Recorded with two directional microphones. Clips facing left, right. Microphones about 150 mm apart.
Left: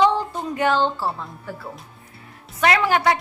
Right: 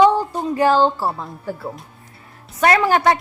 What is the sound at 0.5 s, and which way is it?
A woman's voice, 35° right (ahead or behind).